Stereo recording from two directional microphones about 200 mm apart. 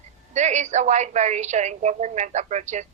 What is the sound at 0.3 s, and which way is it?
Speech, 35° right (ahead or behind).